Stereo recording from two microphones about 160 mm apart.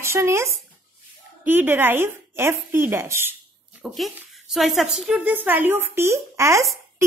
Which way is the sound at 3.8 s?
Centre (ahead or behind).